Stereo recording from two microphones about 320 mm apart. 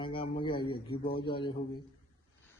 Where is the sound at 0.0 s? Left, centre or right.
Centre.